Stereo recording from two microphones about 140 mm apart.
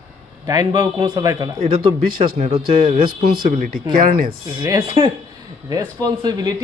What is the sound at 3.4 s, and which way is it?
Speech, 90° right.